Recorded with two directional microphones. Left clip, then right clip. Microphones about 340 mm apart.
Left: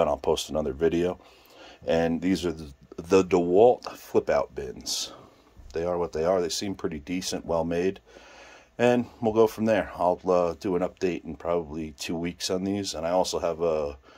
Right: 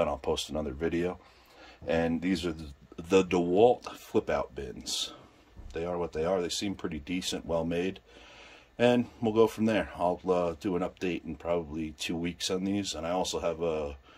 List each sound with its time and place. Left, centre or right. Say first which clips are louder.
0.0 s speech: left 5 dB; centre